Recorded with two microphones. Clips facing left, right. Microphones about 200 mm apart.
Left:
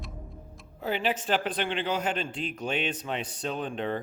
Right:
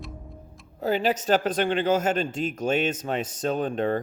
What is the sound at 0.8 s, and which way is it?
A man's voice, 40° right (ahead or behind).